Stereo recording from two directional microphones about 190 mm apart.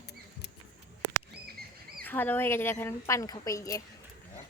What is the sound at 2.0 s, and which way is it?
A woman's voice, 10° left (ahead or behind).